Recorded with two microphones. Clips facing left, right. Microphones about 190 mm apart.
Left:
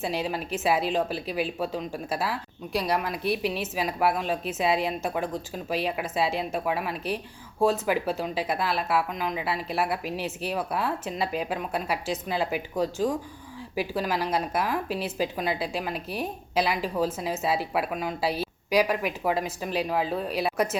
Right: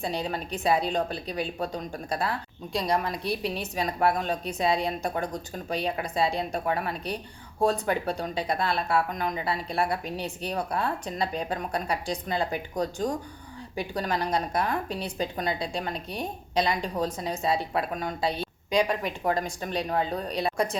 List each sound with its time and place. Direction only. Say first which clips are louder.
0.0 s a woman's voice: left 1 dB; 5° left (ahead or behind)